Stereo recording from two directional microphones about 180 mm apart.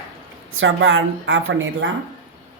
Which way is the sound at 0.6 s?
90° right.